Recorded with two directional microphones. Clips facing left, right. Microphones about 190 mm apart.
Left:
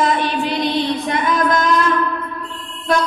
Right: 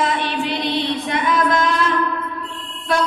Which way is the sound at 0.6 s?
45° left (ahead or behind).